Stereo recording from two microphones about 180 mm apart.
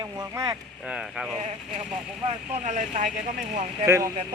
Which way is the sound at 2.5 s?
40° right (ahead or behind).